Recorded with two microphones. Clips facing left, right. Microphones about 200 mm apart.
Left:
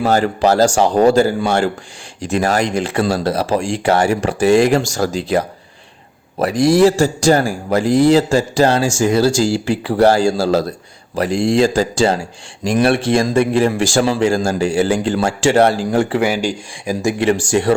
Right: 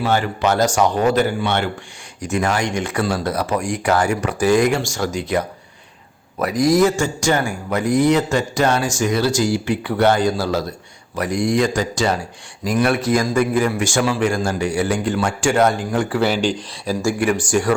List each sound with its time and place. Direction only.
0.0 s a man's voice: 40° left (ahead or behind)
16.2 s speech: 10° left (ahead or behind); by 17.7 s 25° left (ahead or behind)